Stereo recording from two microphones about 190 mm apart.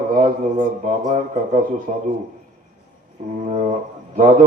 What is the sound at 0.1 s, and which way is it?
A man's voice, 45° right (ahead or behind).